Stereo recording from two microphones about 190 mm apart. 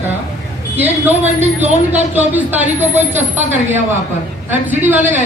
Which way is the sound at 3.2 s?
40° right (ahead or behind).